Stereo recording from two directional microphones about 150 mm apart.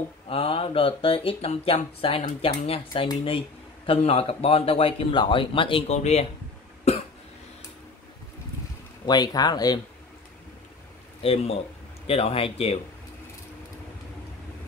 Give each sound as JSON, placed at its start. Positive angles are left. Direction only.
{"t": 0.3, "sound": "speech", "side_deg": 40}
{"t": 9.0, "sound": "speech", "side_deg": 25}
{"t": 11.2, "sound": "speech", "side_deg": 45}